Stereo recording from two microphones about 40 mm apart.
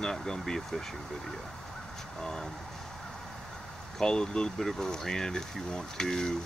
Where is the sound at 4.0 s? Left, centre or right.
Centre.